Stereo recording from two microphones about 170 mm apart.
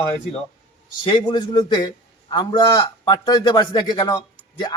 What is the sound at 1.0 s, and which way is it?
A man's voice, 25° left (ahead or behind).